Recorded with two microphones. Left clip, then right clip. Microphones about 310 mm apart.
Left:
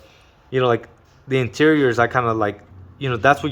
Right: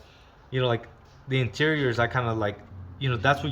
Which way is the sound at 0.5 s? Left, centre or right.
Centre.